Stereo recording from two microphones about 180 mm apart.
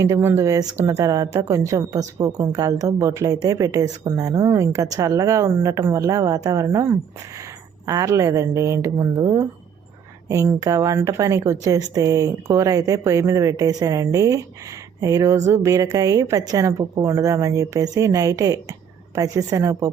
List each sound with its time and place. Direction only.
0.0 s a woman's voice: 15° right (ahead or behind)